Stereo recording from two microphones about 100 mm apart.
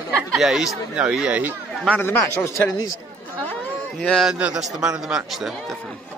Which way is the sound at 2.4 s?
35° left (ahead or behind).